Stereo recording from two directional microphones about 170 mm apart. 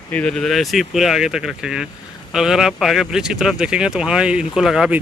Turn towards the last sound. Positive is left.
turn(degrees=-5)  # may be behind; listen again after turning